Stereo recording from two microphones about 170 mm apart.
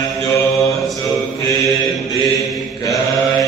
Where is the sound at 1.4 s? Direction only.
20° left (ahead or behind).